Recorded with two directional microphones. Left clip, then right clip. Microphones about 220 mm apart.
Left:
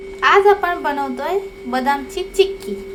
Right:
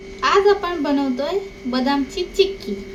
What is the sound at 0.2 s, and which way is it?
A woman's voice, 5° left (ahead or behind).